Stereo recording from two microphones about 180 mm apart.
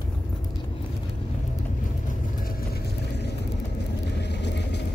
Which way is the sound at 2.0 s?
55° left (ahead or behind).